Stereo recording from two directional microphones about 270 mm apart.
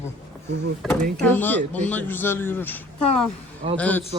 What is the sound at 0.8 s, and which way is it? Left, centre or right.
A man's voice, centre.